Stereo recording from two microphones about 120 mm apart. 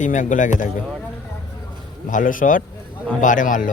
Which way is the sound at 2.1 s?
90° left.